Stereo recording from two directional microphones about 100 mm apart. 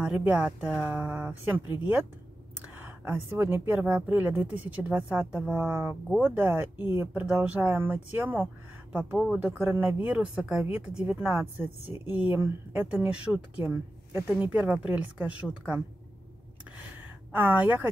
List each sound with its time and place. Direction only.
0.2 s speech: 10° right (ahead or behind)
17.3 s speech: 15° right (ahead or behind)